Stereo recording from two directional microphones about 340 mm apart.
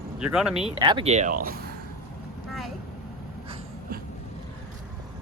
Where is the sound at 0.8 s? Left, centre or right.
Centre.